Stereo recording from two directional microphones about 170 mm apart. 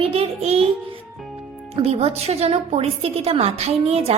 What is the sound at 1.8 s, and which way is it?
A woman's voice, 35° right (ahead or behind).